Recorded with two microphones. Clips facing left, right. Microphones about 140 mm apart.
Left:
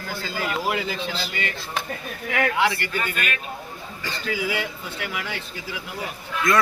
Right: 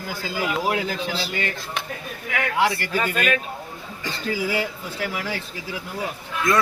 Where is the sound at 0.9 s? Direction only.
40° right (ahead or behind).